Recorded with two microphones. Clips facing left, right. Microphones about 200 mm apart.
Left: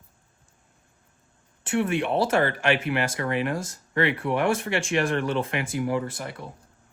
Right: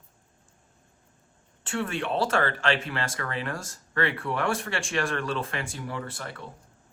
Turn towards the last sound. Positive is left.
turn(degrees=15)  # may be behind; listen again after turning